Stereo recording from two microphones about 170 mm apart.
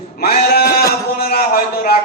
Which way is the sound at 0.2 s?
65° left (ahead or behind).